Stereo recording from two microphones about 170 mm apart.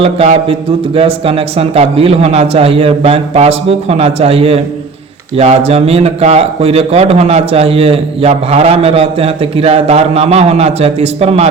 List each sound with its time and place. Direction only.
0.0 s a man's voice: 35° right (ahead or behind)